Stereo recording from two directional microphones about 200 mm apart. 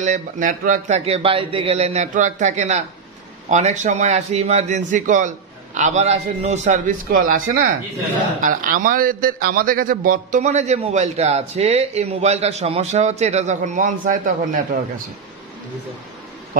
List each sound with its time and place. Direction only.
0.0 s a man's voice: 40° right (ahead or behind)
7.1 s a man's voice: 45° right (ahead or behind)